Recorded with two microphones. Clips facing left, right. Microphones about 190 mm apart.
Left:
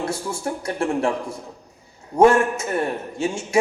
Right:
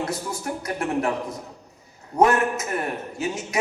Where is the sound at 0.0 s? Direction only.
30° left (ahead or behind).